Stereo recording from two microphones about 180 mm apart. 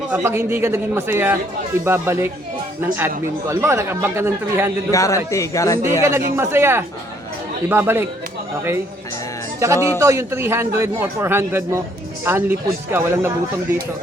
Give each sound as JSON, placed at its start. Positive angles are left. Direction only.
{"t": 0.1, "sound": "a man's voice", "side_deg": -10}
{"t": 3.5, "sound": "a man's voice", "side_deg": -15}
{"t": 4.9, "sound": "a man's voice", "side_deg": 20}
{"t": 5.8, "sound": "a man's voice", "side_deg": -15}
{"t": 9.6, "sound": "a man's voice", "side_deg": -15}